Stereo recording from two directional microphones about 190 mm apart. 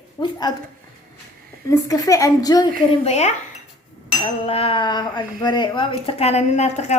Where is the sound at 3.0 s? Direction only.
35° left (ahead or behind).